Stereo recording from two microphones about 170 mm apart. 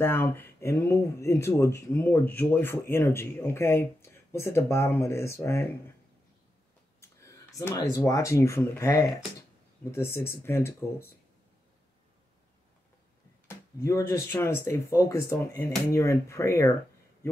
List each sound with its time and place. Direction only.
0.0 s speech: 15° left (ahead or behind)
7.0 s a sound: 15° left (ahead or behind)
7.9 s speech: 20° left (ahead or behind)
13.5 s speech: 20° left (ahead or behind)